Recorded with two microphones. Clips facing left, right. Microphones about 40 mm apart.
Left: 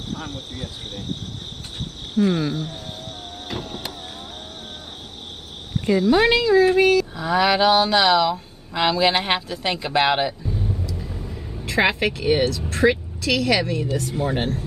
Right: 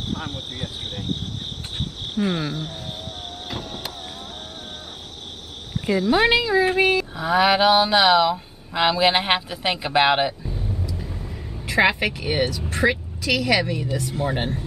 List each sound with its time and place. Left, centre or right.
0.1 s speech: right
2.1 s speech: centre
3.5 s vehicle: centre
5.9 s speech: centre